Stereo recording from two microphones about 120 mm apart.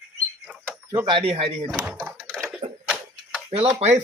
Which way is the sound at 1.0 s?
45° right (ahead or behind).